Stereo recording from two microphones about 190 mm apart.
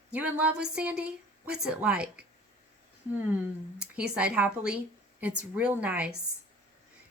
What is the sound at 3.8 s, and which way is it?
A woman's voice, 5° right (ahead or behind).